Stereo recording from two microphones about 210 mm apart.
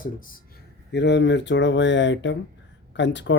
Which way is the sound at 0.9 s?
55° left (ahead or behind).